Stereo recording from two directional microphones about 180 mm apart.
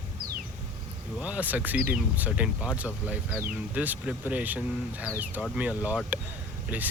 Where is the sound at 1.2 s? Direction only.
10° right (ahead or behind).